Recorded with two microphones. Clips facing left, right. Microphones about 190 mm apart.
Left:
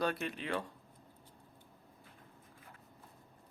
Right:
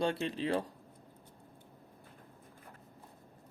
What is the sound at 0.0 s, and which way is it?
Speech, 25° right (ahead or behind).